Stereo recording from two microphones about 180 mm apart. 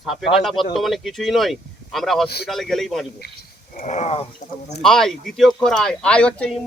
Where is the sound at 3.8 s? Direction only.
40° left (ahead or behind).